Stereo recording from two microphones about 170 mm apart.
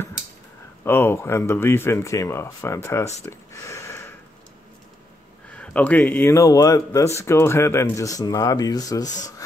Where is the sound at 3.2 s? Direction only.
15° left (ahead or behind).